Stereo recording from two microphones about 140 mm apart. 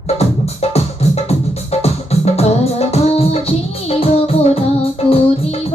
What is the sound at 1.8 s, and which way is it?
Music, 50° left (ahead or behind).